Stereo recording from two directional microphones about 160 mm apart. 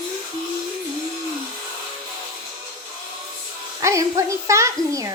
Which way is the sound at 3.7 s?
20° right (ahead or behind).